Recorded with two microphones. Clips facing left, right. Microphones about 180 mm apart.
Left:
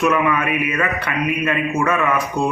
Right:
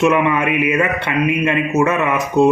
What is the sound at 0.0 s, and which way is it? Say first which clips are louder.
A man's voice: right 3 dB; 25° right (ahead or behind).